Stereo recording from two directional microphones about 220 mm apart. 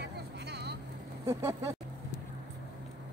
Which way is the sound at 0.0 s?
50° right (ahead or behind).